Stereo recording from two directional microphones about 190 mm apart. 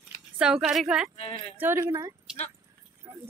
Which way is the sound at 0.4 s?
5° right (ahead or behind).